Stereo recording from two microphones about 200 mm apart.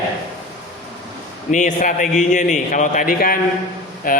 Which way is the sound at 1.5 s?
40° left (ahead or behind).